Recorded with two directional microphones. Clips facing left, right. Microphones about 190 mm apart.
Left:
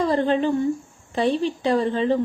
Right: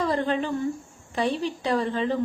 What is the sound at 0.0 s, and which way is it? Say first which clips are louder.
A woman's voice: left 5 dB; 30° left (ahead or behind).